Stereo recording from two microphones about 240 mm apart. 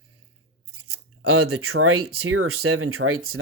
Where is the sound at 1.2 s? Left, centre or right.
Right.